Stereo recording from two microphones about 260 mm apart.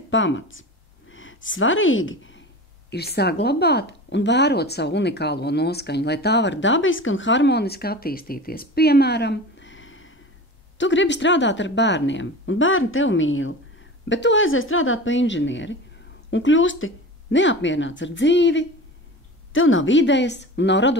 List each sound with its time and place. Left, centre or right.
0.1 s a woman's voice: left